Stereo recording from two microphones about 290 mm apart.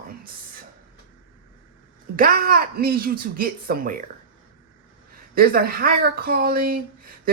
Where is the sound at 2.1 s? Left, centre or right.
Right.